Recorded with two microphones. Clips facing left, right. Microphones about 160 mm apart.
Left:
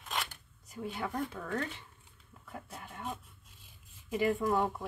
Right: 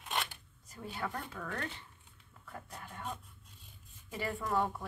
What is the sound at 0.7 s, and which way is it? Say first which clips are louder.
Speech: left 3 dB; 10° left (ahead or behind).